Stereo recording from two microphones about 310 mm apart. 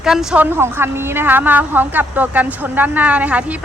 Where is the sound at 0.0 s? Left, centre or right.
Centre.